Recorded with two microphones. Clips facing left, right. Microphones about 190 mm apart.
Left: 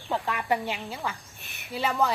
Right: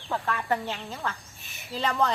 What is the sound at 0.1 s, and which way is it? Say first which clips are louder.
A woman's voice: left 1 dB; 15° left (ahead or behind).